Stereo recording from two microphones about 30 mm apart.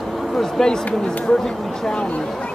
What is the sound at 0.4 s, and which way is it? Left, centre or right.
Speech, centre.